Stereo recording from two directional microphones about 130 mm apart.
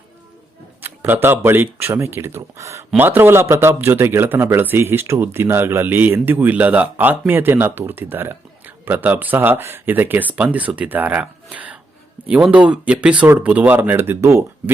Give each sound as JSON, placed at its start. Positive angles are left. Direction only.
{"t": 0.8, "sound": "speech", "side_deg": -15}